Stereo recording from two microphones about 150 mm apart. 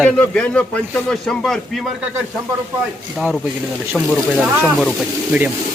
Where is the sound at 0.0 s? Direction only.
5° left (ahead or behind).